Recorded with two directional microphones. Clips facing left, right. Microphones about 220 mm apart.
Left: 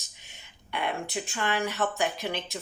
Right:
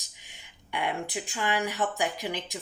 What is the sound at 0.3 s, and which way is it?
Speech, 15° right (ahead or behind).